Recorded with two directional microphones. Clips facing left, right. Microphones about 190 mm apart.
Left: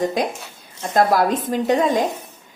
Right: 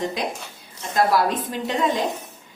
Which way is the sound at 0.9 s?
45° left (ahead or behind).